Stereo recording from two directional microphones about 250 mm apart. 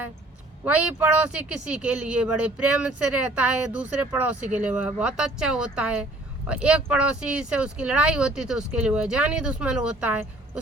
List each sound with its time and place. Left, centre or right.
0.6 s speech: centre